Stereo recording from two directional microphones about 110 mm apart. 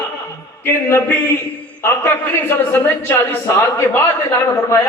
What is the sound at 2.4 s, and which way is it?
A man's voice, 20° left (ahead or behind).